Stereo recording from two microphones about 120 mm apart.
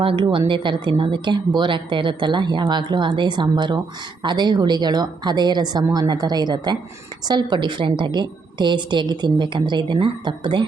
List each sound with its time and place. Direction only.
0.0 s a woman's voice: 45° right (ahead or behind)